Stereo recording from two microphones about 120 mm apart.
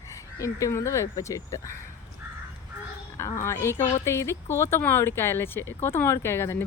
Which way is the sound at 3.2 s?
25° left (ahead or behind).